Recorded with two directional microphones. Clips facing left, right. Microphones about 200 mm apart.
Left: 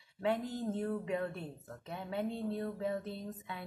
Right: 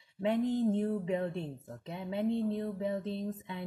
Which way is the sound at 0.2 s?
20° right (ahead or behind).